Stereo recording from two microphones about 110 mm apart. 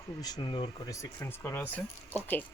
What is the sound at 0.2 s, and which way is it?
Speech, 35° left (ahead or behind).